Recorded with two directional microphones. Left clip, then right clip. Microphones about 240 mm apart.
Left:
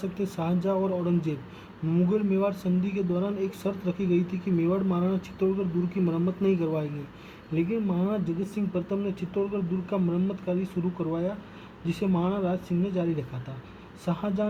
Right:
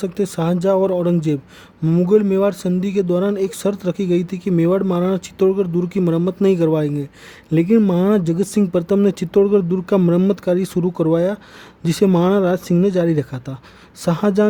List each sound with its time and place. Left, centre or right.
0.0 s speech: right